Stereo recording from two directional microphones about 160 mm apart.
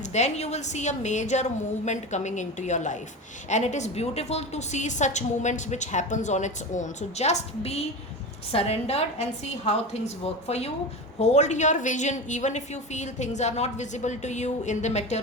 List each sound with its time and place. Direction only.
0.1 s a woman's voice: 45° left (ahead or behind)
10.4 s a woman's voice: 40° left (ahead or behind)